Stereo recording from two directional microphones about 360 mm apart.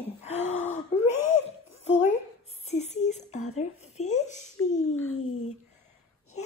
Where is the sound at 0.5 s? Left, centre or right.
Centre.